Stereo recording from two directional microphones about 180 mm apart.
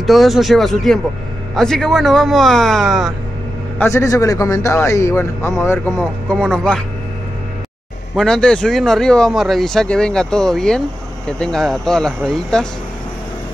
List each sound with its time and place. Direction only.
0.0 s speech: centre (ahead or behind)
3.7 s a man's voice: 15° left (ahead or behind)
5.9 s speech: 5° left (ahead or behind)
8.2 s speech: 5° left (ahead or behind)